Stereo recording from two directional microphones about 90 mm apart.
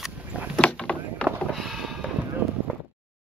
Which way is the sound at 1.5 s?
Centre (ahead or behind).